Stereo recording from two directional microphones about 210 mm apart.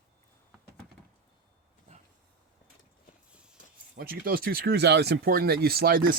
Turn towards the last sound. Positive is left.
turn(degrees=-45)  # may be behind; listen again after turning